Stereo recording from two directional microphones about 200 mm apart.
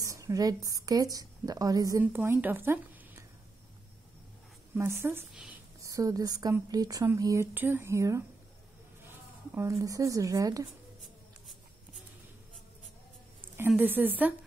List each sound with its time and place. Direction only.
0.0 s a woman's voice: 15° right (ahead or behind)
4.7 s speech: 15° right (ahead or behind)
5.3 s a woman's voice: centre (ahead or behind)
5.8 s speech: 15° right (ahead or behind)
13.6 s speech: 10° right (ahead or behind)